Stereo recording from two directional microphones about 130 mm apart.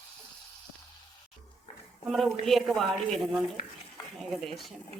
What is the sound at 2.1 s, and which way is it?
Speech, centre (ahead or behind).